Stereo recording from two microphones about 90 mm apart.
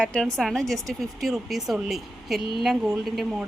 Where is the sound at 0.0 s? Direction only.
10° left (ahead or behind).